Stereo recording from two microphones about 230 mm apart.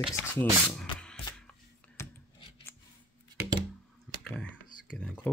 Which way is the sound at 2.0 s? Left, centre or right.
Centre.